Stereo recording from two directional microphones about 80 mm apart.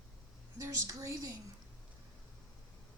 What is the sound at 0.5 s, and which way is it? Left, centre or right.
Speech, right.